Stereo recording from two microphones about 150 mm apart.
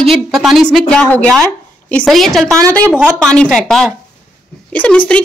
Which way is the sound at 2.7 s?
10° left (ahead or behind).